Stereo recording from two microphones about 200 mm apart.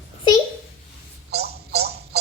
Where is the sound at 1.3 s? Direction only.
55° right (ahead or behind).